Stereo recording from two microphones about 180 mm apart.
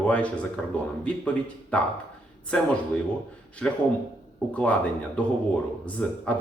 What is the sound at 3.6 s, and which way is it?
A man's voice, 5° left (ahead or behind).